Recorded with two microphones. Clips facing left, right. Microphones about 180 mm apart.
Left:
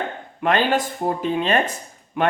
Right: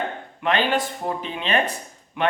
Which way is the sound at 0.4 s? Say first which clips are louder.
Left 2 dB; 45° left (ahead or behind).